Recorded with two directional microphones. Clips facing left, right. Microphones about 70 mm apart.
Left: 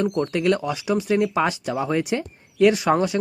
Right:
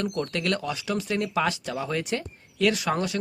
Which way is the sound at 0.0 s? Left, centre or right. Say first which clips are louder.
Left 7 dB; centre.